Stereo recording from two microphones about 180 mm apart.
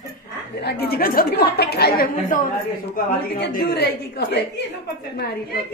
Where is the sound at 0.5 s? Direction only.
60° left (ahead or behind).